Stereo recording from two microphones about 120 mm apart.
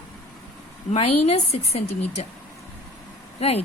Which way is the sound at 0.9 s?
60° left (ahead or behind).